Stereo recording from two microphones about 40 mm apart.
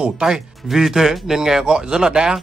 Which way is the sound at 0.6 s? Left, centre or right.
Centre.